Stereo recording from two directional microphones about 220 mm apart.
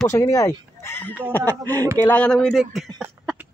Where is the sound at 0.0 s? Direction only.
10° left (ahead or behind).